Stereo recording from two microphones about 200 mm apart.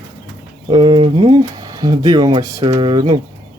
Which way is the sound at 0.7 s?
20° right (ahead or behind).